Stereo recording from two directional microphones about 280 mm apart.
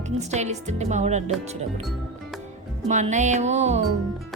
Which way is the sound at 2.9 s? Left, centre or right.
Right.